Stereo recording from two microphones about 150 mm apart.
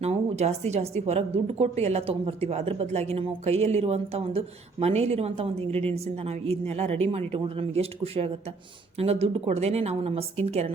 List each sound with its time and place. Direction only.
0.0 s a woman's voice: 45° right (ahead or behind)